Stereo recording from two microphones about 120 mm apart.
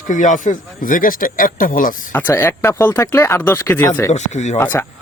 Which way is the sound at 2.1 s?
15° left (ahead or behind).